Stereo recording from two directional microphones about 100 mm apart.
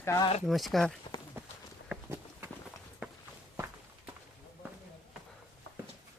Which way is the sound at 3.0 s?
15° right (ahead or behind).